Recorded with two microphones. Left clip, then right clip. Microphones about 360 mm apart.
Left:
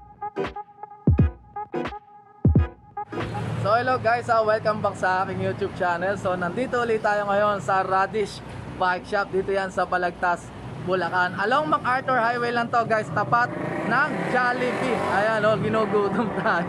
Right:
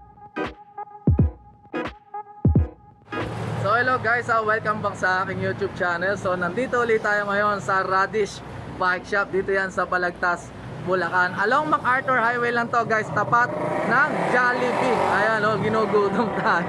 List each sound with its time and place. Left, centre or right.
1.1 s music: centre
2.4 s music: centre
3.1 s speech: centre